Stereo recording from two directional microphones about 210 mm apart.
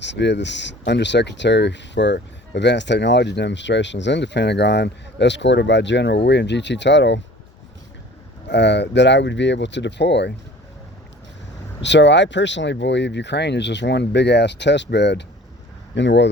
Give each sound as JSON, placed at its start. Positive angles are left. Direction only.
{"t": 0.0, "sound": "speech", "side_deg": 55}
{"t": 8.4, "sound": "speech", "side_deg": 55}
{"t": 11.8, "sound": "speech", "side_deg": 55}